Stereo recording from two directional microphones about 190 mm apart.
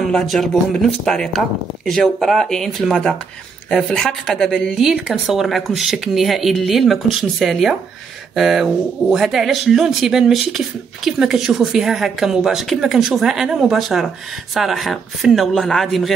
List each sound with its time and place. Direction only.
0.0 s a woman's voice: centre (ahead or behind)